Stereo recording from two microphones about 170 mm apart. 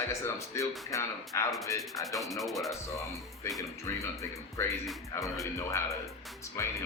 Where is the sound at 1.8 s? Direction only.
Centre (ahead or behind).